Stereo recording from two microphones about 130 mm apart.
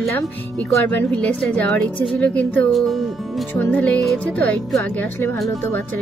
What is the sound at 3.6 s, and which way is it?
A woman's voice, 10° left (ahead or behind).